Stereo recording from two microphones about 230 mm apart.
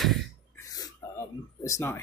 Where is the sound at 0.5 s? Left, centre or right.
Centre.